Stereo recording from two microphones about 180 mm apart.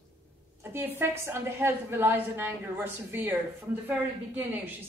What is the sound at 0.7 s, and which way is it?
A woman's voice, 15° right (ahead or behind).